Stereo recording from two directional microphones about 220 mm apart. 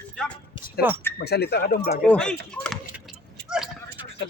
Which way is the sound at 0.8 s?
45° left (ahead or behind).